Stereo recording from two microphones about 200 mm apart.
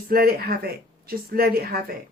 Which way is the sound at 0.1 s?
50° right (ahead or behind).